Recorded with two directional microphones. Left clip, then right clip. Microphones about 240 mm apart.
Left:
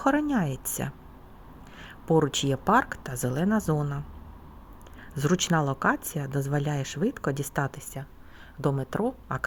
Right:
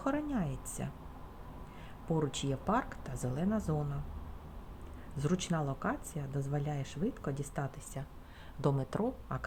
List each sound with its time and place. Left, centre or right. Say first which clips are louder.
0.0 s speech: left 10 dB; left
5.1 s speech: left 10 dB; left
8.6 s a woman's voice: left 6 dB; left